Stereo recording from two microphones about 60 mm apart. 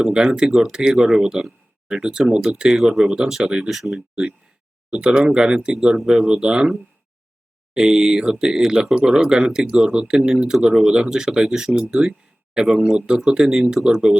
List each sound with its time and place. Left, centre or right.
0.0 s speech: centre
4.1 s speech: centre